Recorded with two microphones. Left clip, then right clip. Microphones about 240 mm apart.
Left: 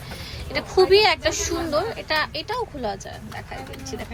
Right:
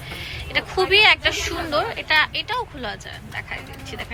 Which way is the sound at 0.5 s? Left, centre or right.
Centre.